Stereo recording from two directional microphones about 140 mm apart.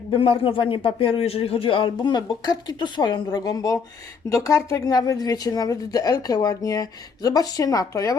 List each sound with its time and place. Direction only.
0.1 s a woman's voice: 35° left (ahead or behind)